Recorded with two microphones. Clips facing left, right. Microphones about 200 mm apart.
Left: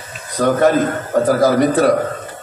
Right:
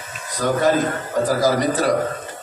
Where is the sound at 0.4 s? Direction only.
60° left (ahead or behind).